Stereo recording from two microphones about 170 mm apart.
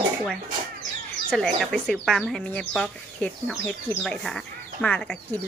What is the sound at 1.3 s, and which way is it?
Speech, 5° left (ahead or behind).